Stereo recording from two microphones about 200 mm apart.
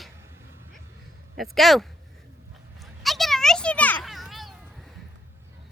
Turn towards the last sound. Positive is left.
turn(degrees=0)  # may be behind; listen again after turning